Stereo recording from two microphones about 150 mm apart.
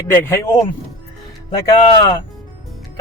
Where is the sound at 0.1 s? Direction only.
15° left (ahead or behind).